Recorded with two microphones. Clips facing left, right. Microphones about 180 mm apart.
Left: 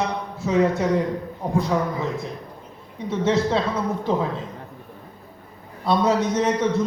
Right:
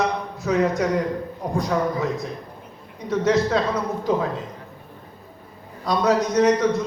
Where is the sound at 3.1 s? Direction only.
25° left (ahead or behind).